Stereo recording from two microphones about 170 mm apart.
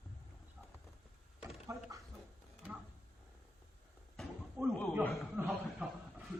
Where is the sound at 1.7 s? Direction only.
20° right (ahead or behind).